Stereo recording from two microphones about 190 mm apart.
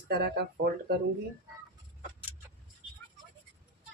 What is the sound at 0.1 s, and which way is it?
Speech, 55° right (ahead or behind).